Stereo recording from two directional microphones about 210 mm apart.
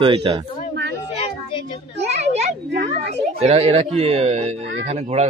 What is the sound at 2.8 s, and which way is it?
Speech, 30° right (ahead or behind).